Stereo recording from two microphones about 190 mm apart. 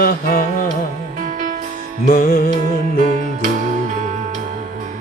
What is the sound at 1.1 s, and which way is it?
Music, 40° right (ahead or behind).